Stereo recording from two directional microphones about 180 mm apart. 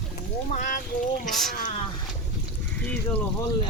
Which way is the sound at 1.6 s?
40° left (ahead or behind).